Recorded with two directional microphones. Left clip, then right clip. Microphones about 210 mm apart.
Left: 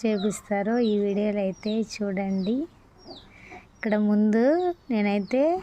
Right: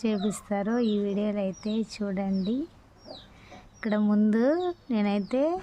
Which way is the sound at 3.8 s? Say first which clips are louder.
Left 3 dB; 5° left (ahead or behind).